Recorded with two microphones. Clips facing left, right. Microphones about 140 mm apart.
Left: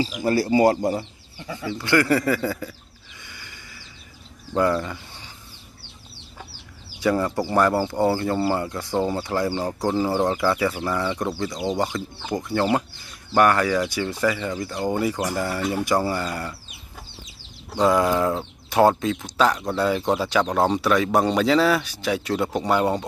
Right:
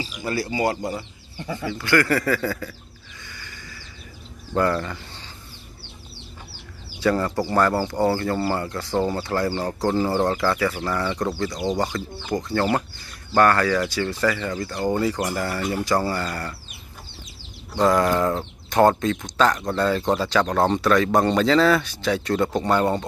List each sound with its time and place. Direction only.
0.2 s speech: 40° left (ahead or behind)
1.7 s speech: 20° left (ahead or behind)
3.3 s a sound: 20° left (ahead or behind)
4.6 s speech: 10° left (ahead or behind)
7.0 s speech: 15° left (ahead or behind)
11.5 s speech: centre (ahead or behind)
12.4 s speech: 15° left (ahead or behind)
17.7 s speech: 10° left (ahead or behind)